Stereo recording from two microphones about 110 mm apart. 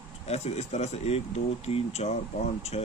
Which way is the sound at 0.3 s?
80° left.